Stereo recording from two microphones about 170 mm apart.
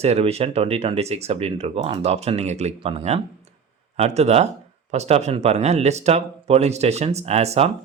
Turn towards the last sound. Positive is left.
turn(degrees=-40)  # may be behind; listen again after turning